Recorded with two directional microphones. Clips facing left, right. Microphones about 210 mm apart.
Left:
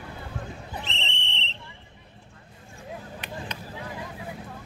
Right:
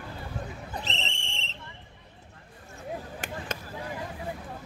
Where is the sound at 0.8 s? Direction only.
40° right (ahead or behind).